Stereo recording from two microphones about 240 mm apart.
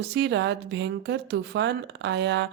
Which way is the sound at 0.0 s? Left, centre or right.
Right.